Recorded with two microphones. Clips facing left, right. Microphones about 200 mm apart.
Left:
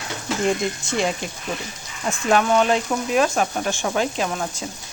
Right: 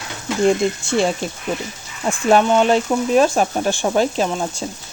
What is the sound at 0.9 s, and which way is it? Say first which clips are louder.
Speech: right 5 dB; 30° right (ahead or behind).